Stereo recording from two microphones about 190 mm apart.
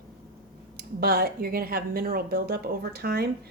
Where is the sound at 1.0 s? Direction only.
55° right (ahead or behind).